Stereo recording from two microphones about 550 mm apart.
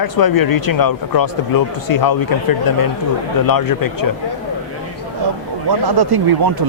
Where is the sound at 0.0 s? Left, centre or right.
Left.